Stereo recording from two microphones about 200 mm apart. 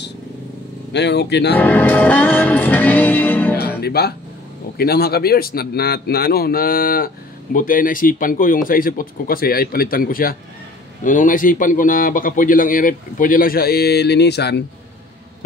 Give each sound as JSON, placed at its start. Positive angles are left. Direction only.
{"t": 0.9, "sound": "speech", "side_deg": 60}
{"t": 1.6, "sound": "music", "side_deg": 10}
{"t": 3.8, "sound": "speech", "side_deg": 50}